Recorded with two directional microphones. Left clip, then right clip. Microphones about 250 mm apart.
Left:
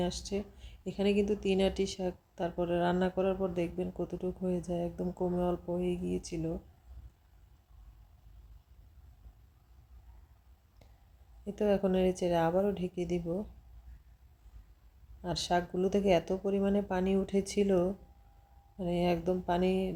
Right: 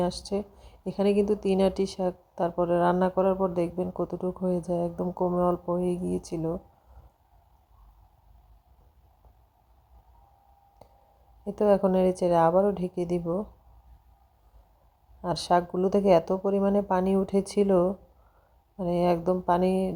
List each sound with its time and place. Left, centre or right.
0.0 s a woman's voice: centre
10.8 s a sound: centre
11.4 s a woman's voice: centre
15.2 s a woman's voice: centre